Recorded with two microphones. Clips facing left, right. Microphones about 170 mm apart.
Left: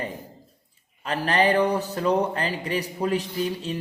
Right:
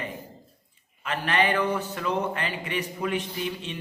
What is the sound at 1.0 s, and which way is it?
A man's voice, 35° left (ahead or behind).